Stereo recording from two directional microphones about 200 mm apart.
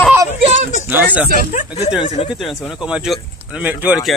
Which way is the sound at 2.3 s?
Centre (ahead or behind).